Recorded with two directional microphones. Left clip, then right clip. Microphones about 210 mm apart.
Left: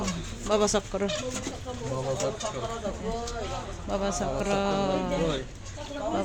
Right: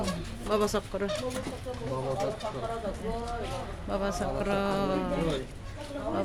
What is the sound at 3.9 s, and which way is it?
Speech, 15° left (ahead or behind).